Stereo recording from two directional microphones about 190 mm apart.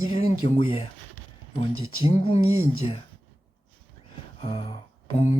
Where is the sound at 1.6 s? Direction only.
30° left (ahead or behind).